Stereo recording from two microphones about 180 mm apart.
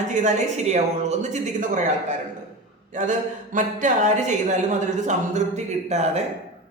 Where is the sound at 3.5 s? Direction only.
45° right (ahead or behind).